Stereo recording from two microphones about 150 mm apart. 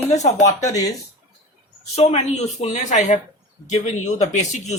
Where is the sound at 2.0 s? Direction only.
45° left (ahead or behind).